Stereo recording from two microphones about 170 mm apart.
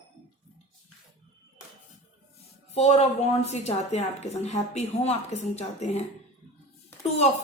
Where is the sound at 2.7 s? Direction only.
40° left (ahead or behind).